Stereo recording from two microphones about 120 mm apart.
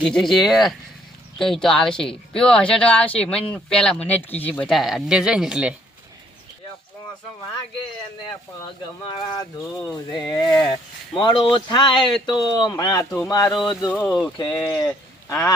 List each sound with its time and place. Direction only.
0.0 s a woman's voice: centre (ahead or behind)
4.7 s speech: centre (ahead or behind)
9.0 s speech: 35° left (ahead or behind)
10.7 s speech: 40° left (ahead or behind)
13.6 s speech: 5° left (ahead or behind)
14.3 s speech: 35° left (ahead or behind)